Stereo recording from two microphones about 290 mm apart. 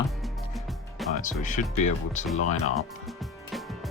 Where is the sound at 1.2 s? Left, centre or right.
Left.